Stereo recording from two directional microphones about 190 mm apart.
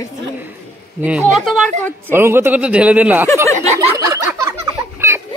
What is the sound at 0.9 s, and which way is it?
A man's voice, 5° right (ahead or behind).